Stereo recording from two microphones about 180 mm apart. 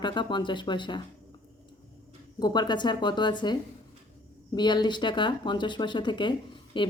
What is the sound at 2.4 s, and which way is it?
Speech, 25° left (ahead or behind).